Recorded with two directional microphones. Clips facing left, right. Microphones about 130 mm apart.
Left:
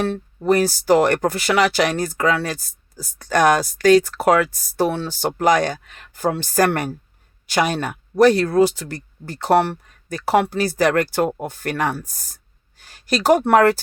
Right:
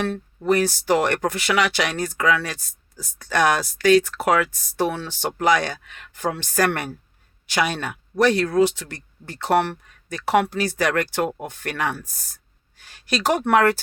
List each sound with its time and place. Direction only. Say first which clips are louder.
0.0 s speech: left 3 dB; 35° left (ahead or behind)